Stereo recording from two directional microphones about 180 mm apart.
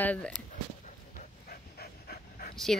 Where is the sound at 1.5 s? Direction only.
60° left (ahead or behind).